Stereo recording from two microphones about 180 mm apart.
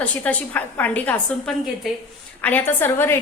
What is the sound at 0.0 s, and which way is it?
A woman's voice, 10° left (ahead or behind).